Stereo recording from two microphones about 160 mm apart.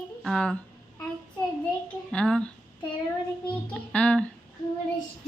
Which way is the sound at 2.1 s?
5° left (ahead or behind).